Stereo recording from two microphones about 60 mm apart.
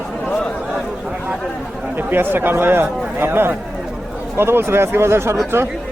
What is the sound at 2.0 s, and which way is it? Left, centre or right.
Speech, right.